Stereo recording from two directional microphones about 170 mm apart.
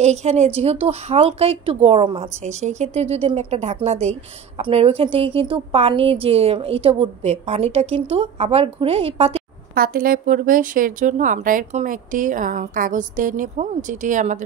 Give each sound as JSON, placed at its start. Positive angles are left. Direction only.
{"t": 0.0, "sound": "speech", "side_deg": -40}
{"t": 2.4, "sound": "speech", "side_deg": -45}
{"t": 9.8, "sound": "speech", "side_deg": -60}